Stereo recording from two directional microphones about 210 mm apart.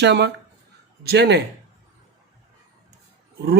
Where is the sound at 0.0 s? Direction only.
55° right (ahead or behind).